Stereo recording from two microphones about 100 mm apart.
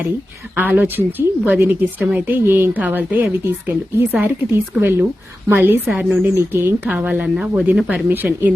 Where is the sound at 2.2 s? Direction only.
20° right (ahead or behind).